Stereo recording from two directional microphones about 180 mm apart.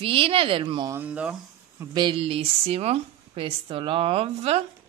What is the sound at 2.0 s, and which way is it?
Speech, 30° right (ahead or behind).